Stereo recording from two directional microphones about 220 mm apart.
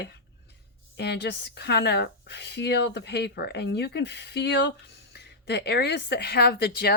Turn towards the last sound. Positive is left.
turn(degrees=45)  # may be behind; listen again after turning